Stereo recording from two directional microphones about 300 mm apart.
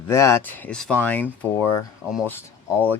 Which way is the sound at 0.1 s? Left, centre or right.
Centre.